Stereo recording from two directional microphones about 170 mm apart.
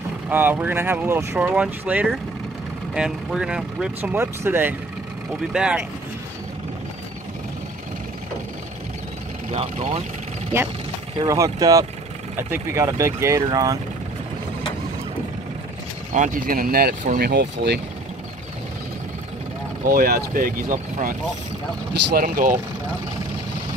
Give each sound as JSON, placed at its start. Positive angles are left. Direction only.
{"t": 0.3, "sound": "speech", "side_deg": -10}
{"t": 9.5, "sound": "speech", "side_deg": -35}
{"t": 10.5, "sound": "speech", "side_deg": -15}
{"t": 16.1, "sound": "speech", "side_deg": -50}
{"t": 19.8, "sound": "speech", "side_deg": -60}
{"t": 22.1, "sound": "speech", "side_deg": -55}